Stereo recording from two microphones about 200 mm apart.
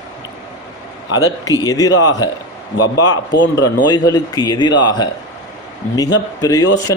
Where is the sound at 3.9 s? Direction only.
20° left (ahead or behind).